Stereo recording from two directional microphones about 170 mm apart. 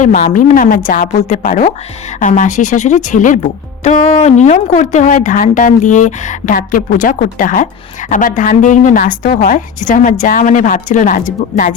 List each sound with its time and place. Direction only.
0.0 s speech: 45° left (ahead or behind)